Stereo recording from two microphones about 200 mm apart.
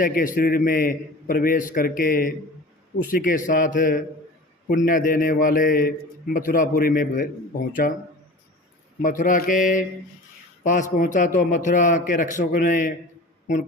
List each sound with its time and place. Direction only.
0.0 s a man's voice: 45° left (ahead or behind)
9.0 s a man's voice: 40° left (ahead or behind)